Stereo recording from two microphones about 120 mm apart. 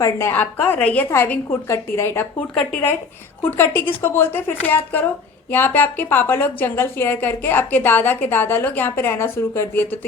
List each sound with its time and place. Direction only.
0.0 s a woman's voice: 20° left (ahead or behind)